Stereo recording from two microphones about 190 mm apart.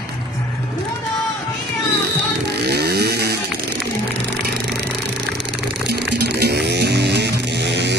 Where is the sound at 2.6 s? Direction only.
60° right (ahead or behind).